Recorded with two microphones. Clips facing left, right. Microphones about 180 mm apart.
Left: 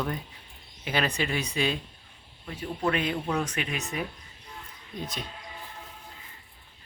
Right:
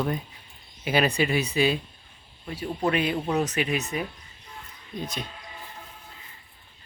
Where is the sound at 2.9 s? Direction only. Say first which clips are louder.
Right 3 dB; 10° right (ahead or behind).